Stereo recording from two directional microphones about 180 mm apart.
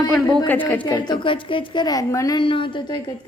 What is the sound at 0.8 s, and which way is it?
A woman's voice, 25° left (ahead or behind).